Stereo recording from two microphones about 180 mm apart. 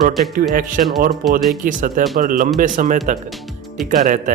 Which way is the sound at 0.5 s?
50° right (ahead or behind).